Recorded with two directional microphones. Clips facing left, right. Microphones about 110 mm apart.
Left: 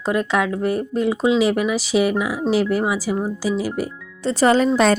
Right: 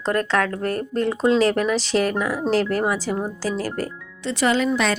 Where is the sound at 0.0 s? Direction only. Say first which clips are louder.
Left 1 dB; 10° left (ahead or behind).